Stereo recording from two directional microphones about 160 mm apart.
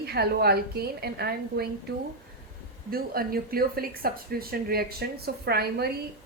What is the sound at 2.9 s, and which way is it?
Speech, 70° right (ahead or behind).